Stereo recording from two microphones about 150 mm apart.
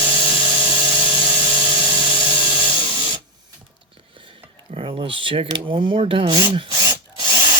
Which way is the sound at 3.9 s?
35° right (ahead or behind).